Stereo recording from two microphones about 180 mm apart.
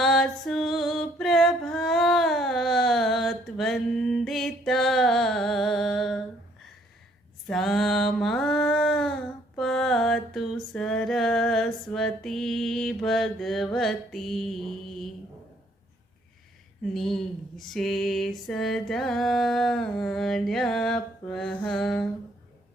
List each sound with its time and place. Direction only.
0.0 s music: centre (ahead or behind)
7.4 s a sound: centre (ahead or behind)
9.6 s music: centre (ahead or behind)
16.9 s music: centre (ahead or behind)